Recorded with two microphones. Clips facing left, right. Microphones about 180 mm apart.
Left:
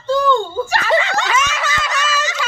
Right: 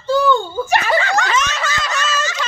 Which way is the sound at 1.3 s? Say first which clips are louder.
Even; 5° left (ahead or behind).